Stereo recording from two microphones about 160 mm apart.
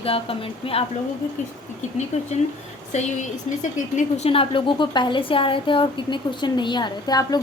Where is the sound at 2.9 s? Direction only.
50° left (ahead or behind).